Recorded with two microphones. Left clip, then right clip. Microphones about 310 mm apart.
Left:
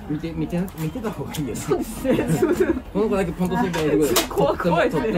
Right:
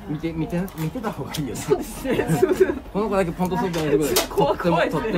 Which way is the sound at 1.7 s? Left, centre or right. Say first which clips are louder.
Even; centre.